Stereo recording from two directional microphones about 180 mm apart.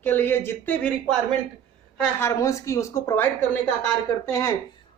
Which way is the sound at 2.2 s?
15° left (ahead or behind).